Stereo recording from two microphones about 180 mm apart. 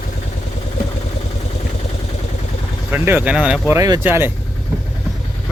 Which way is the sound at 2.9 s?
10° right (ahead or behind).